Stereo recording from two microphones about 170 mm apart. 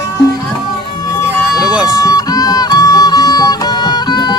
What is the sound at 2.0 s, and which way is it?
Music, 20° left (ahead or behind).